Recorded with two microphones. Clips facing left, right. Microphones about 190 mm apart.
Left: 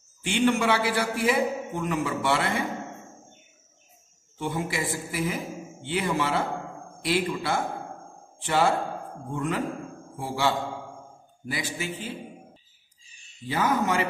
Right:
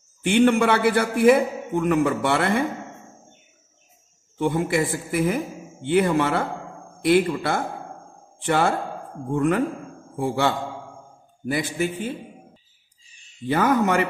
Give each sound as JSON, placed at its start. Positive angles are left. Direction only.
{"t": 0.2, "sound": "a man's voice", "side_deg": -55}
{"t": 4.4, "sound": "a man's voice", "side_deg": -55}
{"t": 13.5, "sound": "a man's voice", "side_deg": -55}